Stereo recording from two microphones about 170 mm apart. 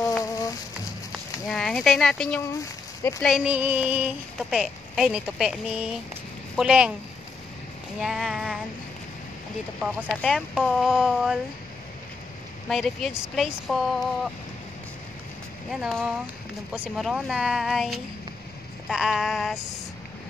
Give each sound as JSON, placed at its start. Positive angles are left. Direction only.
{"t": 1.5, "sound": "speech", "side_deg": 0}
{"t": 2.4, "sound": "speech", "side_deg": 15}
{"t": 3.2, "sound": "child singing", "side_deg": 0}
{"t": 8.0, "sound": "a sound", "side_deg": 0}
{"t": 9.8, "sound": "child singing", "side_deg": 0}
{"t": 12.6, "sound": "child singing", "side_deg": 0}
{"t": 15.7, "sound": "child singing", "side_deg": 0}
{"t": 16.7, "sound": "speech", "side_deg": -10}
{"t": 17.0, "sound": "child singing", "side_deg": 0}